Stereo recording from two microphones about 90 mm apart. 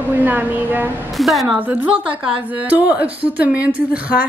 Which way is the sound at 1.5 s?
20° right (ahead or behind).